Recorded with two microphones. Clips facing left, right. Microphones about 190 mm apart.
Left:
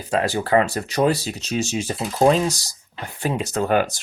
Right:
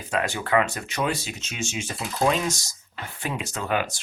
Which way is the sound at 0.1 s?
35° left (ahead or behind).